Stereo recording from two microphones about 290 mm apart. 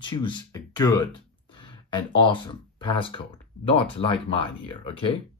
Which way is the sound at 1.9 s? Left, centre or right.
Centre.